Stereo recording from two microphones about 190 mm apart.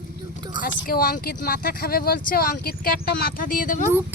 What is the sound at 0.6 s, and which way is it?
Speech, 50° left (ahead or behind).